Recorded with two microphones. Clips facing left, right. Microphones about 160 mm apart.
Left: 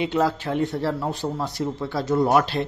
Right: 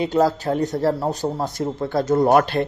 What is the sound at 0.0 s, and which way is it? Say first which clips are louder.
A man's voice: right 4 dB; 40° right (ahead or behind).